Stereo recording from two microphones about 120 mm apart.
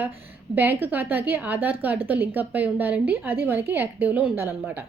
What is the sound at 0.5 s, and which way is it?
A woman's voice, 15° right (ahead or behind).